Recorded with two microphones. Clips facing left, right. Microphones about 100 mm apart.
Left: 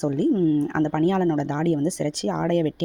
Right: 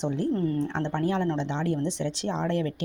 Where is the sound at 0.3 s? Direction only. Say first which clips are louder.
Left 7 dB; 35° left (ahead or behind).